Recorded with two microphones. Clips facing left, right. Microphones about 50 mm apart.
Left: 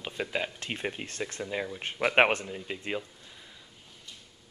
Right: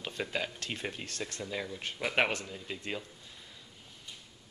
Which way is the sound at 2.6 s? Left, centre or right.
Left.